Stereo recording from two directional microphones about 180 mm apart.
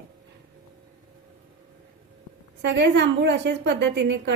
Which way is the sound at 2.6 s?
75° right (ahead or behind).